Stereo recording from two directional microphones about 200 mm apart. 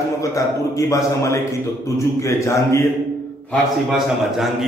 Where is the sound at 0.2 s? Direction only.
15° left (ahead or behind).